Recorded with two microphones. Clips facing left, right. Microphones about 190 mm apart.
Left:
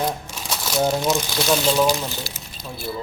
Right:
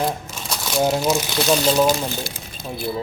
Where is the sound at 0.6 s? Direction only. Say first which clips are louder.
Right 1 dB; 5° right (ahead or behind).